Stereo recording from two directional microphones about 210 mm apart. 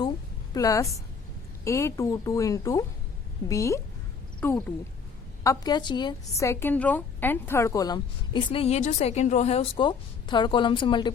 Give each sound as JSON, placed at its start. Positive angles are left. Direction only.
{"t": 0.5, "sound": "a woman's voice", "side_deg": 15}